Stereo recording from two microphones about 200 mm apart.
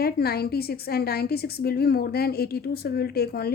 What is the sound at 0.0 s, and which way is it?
A woman's voice, 50° left (ahead or behind).